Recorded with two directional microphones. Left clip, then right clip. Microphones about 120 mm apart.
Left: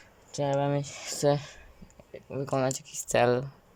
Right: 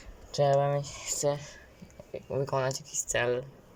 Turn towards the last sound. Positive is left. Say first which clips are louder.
# left 4 dB
turn(degrees=40)  # may be behind; listen again after turning